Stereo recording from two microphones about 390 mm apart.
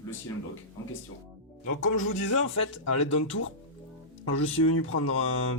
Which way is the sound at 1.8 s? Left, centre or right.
Left.